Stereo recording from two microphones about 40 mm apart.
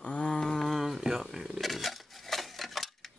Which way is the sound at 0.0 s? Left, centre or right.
Left.